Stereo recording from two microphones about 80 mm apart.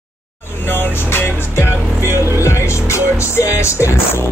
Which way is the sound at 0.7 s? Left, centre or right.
Left.